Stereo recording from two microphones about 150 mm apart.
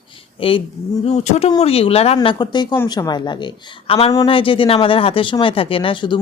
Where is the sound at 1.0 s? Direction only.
50° left (ahead or behind).